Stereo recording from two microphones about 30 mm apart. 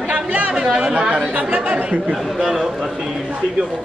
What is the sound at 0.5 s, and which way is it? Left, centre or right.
Speech, right.